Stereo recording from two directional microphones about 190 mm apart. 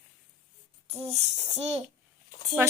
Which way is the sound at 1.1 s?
35° right (ahead or behind).